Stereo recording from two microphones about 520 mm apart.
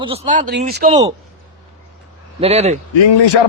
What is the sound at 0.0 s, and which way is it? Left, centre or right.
A man's voice, centre.